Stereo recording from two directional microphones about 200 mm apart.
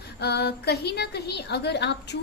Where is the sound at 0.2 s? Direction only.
55° left (ahead or behind).